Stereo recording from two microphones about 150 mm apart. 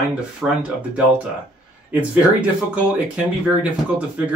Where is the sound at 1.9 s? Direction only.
10° right (ahead or behind).